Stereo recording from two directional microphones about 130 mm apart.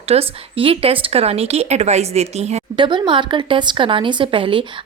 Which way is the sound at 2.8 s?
40° right (ahead or behind).